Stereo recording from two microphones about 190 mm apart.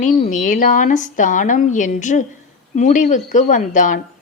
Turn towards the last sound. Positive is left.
turn(degrees=45)  # may be behind; listen again after turning